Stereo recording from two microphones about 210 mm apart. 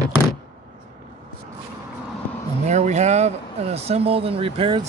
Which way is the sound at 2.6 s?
35° right (ahead or behind).